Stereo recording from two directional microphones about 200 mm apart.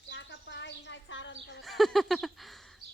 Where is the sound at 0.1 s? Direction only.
65° left (ahead or behind).